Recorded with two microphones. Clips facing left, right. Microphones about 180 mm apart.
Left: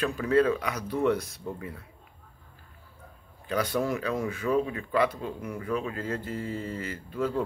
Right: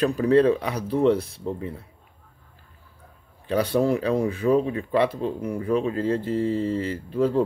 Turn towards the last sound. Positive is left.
turn(degrees=-35)  # may be behind; listen again after turning